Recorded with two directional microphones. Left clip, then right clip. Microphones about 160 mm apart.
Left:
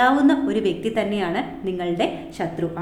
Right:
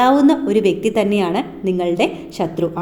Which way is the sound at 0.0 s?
30° right (ahead or behind).